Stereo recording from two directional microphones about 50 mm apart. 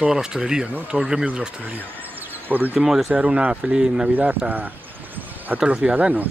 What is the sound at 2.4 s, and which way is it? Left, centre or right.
Speech, right.